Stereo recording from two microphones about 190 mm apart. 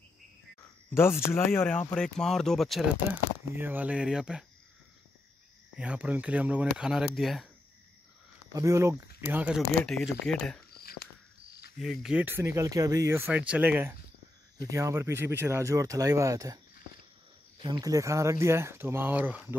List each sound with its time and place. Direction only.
0.8 s speech: 10° left (ahead or behind)
3.5 s speech: 10° right (ahead or behind)
5.8 s speech: 5° right (ahead or behind)
8.5 s speech: 15° right (ahead or behind); by 10.6 s 5° left (ahead or behind)
10.7 s cricket: 55° left (ahead or behind)
11.8 s speech: centre (ahead or behind)
17.6 s speech: 20° right (ahead or behind)